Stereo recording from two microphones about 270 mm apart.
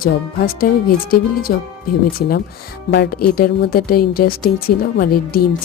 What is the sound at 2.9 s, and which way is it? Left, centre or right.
Speech, left.